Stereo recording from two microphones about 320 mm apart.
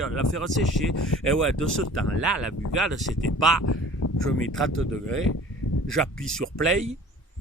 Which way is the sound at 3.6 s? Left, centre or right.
Left.